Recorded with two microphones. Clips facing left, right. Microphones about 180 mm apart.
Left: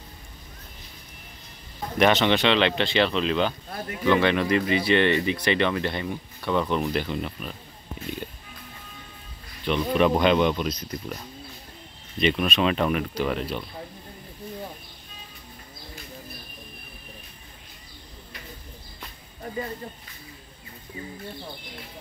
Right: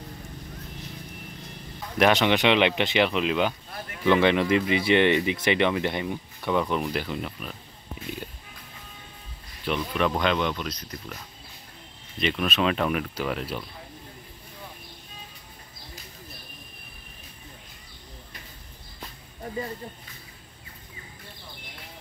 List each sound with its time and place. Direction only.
2.0 s speech: 5° right (ahead or behind)
6.6 s speech: centre (ahead or behind)
9.9 s speech: 15° left (ahead or behind)
12.2 s speech: centre (ahead or behind)